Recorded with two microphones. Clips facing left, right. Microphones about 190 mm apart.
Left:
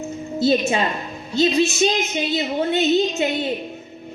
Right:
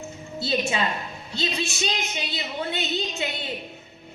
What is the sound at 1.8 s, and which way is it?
Music, 45° left (ahead or behind).